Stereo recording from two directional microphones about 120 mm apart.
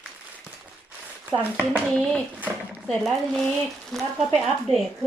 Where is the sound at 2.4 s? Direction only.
15° right (ahead or behind).